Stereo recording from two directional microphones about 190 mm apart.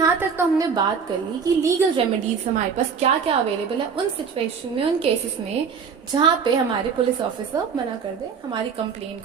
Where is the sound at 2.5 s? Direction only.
40° right (ahead or behind).